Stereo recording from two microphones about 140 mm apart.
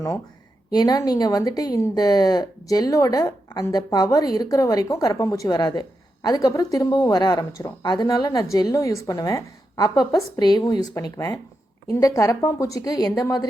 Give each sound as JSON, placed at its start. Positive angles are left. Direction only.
{"t": 0.7, "sound": "speech", "side_deg": 30}